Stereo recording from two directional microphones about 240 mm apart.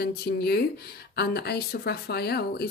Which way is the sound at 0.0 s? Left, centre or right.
Left.